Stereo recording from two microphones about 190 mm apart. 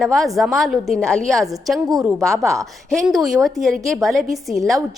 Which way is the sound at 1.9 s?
15° right (ahead or behind).